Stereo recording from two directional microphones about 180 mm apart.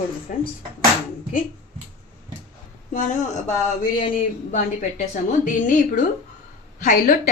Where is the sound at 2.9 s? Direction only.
45° left (ahead or behind).